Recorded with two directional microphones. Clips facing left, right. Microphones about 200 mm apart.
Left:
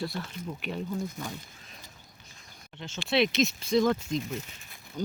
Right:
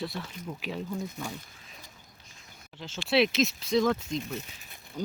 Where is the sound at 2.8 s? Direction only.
5° right (ahead or behind).